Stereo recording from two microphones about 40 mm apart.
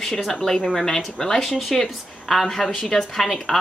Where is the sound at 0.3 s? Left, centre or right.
Centre.